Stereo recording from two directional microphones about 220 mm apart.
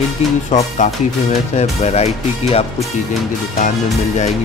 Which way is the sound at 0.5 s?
30° left (ahead or behind).